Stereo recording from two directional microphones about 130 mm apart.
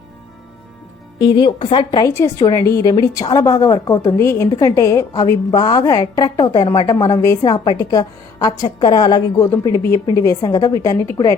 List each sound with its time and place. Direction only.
1.2 s a woman's voice: 35° left (ahead or behind)